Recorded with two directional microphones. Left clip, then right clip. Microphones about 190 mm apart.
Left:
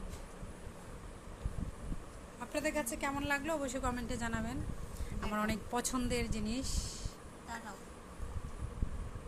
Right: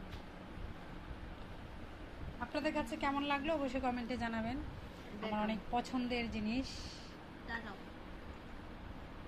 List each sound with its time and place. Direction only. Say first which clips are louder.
2.5 s a woman's voice: left 2 dB; 20° left (ahead or behind)
5.3 s speech: left 1 dB; 30° left (ahead or behind)